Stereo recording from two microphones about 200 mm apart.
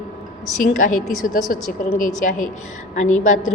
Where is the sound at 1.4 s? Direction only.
40° left (ahead or behind).